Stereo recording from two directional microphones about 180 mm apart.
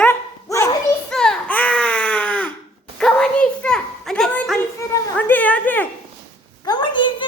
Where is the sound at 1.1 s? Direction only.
5° left (ahead or behind).